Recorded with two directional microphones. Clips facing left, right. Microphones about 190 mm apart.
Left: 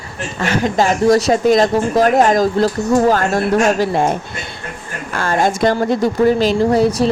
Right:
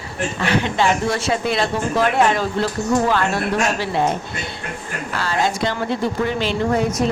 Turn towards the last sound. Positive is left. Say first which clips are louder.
# left 5 dB
turn(degrees=35)  # may be behind; listen again after turning